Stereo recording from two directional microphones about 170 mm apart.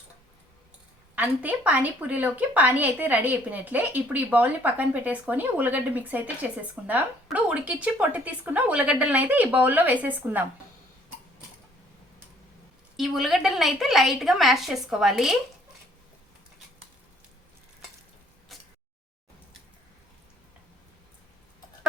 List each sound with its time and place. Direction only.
1.1 s a woman's voice: 10° right (ahead or behind)
13.0 s a woman's voice: centre (ahead or behind)
18.5 s a sound: centre (ahead or behind)